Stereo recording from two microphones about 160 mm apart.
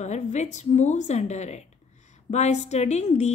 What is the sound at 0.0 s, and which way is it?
A woman's voice, 45° left (ahead or behind).